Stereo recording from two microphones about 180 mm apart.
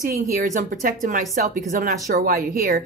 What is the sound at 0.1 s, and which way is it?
Speech, 45° right (ahead or behind).